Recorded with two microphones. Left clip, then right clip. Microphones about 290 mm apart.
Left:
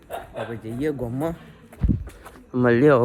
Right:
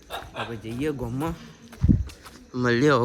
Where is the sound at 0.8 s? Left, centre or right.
Centre.